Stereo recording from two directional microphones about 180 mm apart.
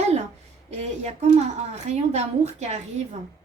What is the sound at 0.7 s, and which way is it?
Speech, 35° right (ahead or behind).